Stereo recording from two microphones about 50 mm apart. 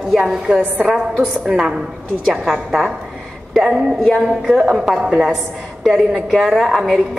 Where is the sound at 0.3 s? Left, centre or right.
Centre.